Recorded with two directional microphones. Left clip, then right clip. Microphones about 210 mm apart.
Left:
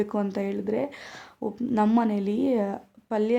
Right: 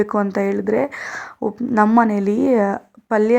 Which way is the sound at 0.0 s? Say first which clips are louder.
Right 9 dB; 15° right (ahead or behind).